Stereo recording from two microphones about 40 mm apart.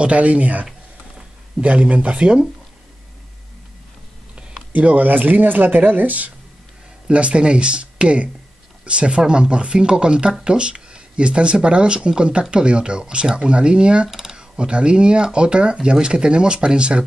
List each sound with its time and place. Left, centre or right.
0.0 s speech: right
4.7 s speech: right
7.1 s speech: right
14.0 s speech: centre
14.3 s speech: right